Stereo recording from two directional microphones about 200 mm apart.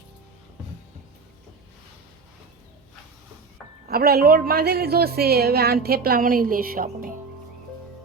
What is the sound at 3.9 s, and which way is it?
A woman's voice, 50° right (ahead or behind).